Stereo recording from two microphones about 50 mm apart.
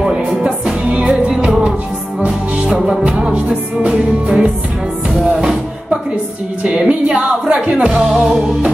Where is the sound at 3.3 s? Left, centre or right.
Right.